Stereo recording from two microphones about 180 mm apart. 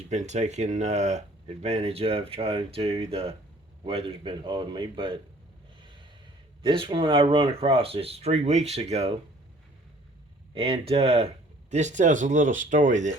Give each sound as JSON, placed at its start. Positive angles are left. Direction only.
{"t": 0.1, "sound": "a man's voice", "side_deg": -40}
{"t": 6.6, "sound": "speech", "side_deg": -25}
{"t": 10.5, "sound": "speech", "side_deg": -30}